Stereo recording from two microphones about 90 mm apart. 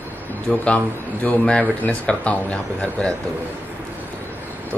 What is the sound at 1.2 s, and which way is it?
Speech, 10° left (ahead or behind).